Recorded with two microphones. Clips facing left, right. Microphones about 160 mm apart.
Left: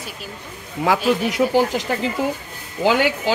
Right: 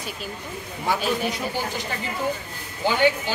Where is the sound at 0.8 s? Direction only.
90° left.